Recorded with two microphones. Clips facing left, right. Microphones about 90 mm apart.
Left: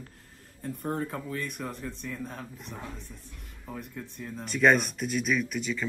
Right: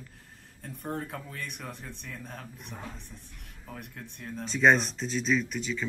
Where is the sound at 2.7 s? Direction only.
15° left (ahead or behind).